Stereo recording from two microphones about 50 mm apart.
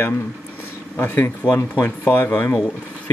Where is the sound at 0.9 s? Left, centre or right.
Left.